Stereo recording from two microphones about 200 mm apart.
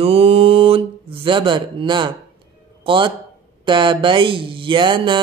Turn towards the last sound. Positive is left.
turn(degrees=-25)  # may be behind; listen again after turning